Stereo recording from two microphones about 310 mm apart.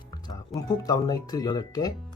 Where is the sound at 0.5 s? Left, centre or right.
Centre.